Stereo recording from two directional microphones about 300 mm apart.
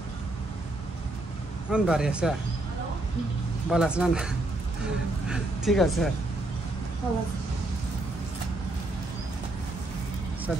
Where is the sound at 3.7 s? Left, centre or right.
Centre.